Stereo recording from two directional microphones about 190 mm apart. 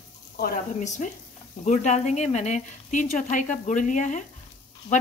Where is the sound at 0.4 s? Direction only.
40° left (ahead or behind).